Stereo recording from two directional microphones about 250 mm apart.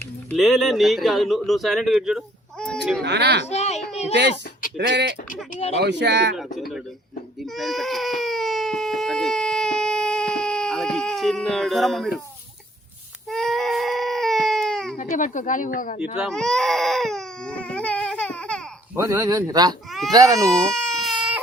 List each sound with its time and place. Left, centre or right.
0.3 s speech: centre
3.0 s speech: right
3.4 s a child's voice: left
4.1 s speech: right
5.5 s speech: left
5.8 s speech: right
6.6 s speech: centre
7.4 s baby cry: centre
13.2 s baby cry: centre
14.9 s speech: left
16.0 s baby cry: centre
18.9 s speech: centre
20.5 s baby cry: centre